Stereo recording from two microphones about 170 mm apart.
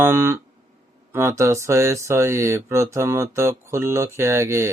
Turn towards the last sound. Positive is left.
turn(degrees=-15)  # may be behind; listen again after turning